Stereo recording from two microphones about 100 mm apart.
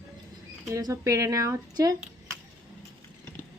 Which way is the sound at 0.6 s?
30° right (ahead or behind).